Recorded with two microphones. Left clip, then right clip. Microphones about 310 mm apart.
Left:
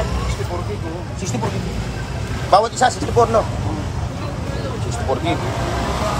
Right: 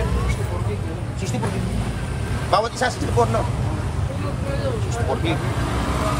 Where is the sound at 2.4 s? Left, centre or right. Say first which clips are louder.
Left 6 dB; centre.